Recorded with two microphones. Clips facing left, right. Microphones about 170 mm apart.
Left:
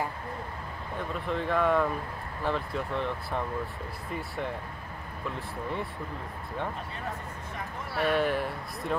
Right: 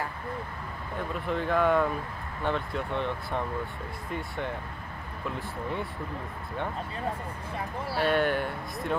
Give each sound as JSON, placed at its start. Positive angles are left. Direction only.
{"t": 0.9, "sound": "speech", "side_deg": 0}
{"t": 7.1, "sound": "speech", "side_deg": -30}
{"t": 8.0, "sound": "speech", "side_deg": 0}